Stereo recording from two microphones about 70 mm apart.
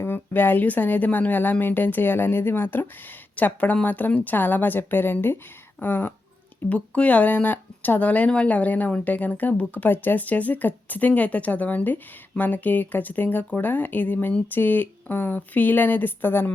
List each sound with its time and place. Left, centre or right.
0.0 s speech: left
6.7 s speech: centre